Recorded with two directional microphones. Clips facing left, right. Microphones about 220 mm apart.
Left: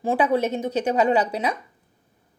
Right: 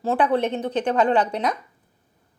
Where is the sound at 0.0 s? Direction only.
10° left (ahead or behind).